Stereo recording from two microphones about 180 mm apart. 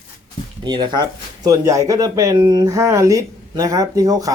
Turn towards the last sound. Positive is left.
turn(degrees=-20)  # may be behind; listen again after turning